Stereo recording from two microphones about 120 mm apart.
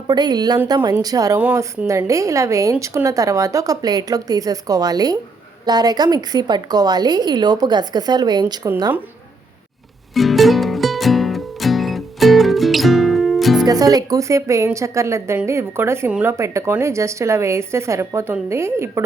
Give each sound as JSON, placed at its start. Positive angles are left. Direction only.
{"t": 0.1, "sound": "a woman's voice", "side_deg": -35}
{"t": 10.2, "sound": "music", "side_deg": 0}
{"t": 13.7, "sound": "a woman's voice", "side_deg": -30}